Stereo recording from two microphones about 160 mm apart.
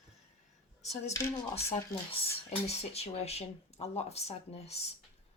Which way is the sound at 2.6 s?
40° left (ahead or behind).